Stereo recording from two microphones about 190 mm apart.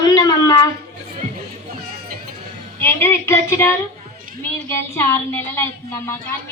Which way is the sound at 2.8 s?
15° left (ahead or behind).